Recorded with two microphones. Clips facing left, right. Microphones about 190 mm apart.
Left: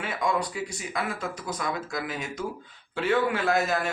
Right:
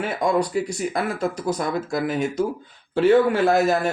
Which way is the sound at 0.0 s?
35° right (ahead or behind).